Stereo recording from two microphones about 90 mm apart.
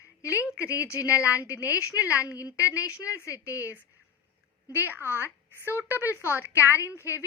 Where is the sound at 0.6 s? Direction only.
35° left (ahead or behind).